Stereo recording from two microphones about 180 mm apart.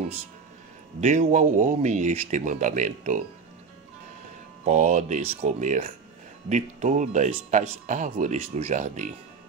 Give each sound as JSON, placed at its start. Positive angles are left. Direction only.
{"t": 1.0, "sound": "speech", "side_deg": -40}
{"t": 4.6, "sound": "speech", "side_deg": -40}